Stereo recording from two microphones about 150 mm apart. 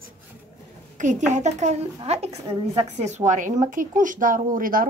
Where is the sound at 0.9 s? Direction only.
55° right (ahead or behind).